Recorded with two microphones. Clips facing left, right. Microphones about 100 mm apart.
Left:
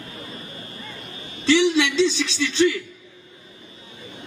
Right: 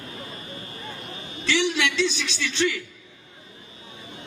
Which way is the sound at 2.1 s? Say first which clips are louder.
Left 6 dB; 25° left (ahead or behind).